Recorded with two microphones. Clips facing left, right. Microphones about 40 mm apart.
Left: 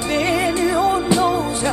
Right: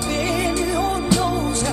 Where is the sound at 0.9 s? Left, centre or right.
Centre.